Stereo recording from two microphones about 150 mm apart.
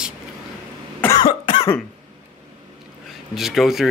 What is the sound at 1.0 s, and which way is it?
Cough, 25° left (ahead or behind).